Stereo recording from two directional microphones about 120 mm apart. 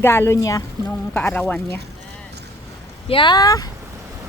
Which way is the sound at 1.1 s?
15° left (ahead or behind).